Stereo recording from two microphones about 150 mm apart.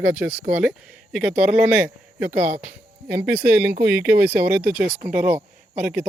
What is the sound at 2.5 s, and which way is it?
Speech, 75° right (ahead or behind).